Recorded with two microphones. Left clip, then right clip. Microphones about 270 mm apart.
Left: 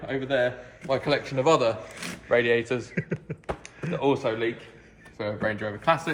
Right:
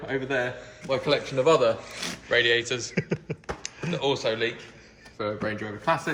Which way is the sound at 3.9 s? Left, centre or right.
Left.